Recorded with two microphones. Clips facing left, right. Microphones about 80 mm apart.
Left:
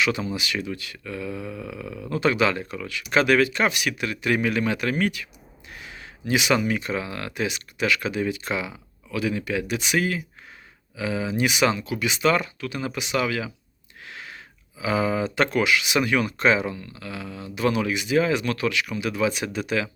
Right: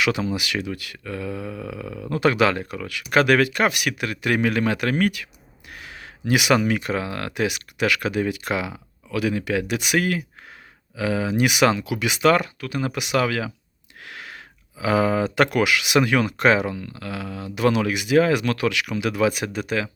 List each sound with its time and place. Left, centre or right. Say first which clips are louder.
0.0 s speech: right 2 dB; right